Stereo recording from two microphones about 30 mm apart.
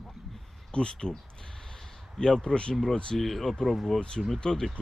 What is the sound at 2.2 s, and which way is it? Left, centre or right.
Speech, left.